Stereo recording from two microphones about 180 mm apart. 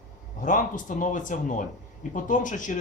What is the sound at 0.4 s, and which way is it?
Speech, 45° left (ahead or behind).